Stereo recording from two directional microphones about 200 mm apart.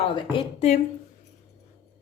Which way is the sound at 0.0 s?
30° left (ahead or behind).